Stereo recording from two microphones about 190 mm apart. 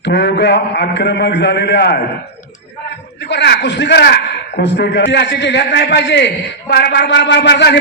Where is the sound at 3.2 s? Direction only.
65° left (ahead or behind).